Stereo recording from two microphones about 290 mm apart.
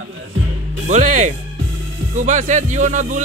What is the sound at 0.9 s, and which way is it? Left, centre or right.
Speech, right.